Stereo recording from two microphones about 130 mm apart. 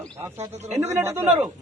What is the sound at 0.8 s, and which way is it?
Speech, 20° right (ahead or behind).